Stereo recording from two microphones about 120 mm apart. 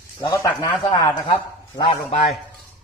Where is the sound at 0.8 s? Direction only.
35° left (ahead or behind).